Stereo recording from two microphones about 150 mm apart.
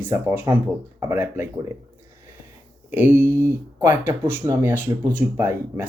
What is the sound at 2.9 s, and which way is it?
Speech, 15° right (ahead or behind).